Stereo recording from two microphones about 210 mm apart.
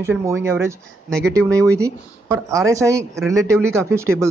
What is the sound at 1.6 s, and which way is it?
Speech, 15° right (ahead or behind).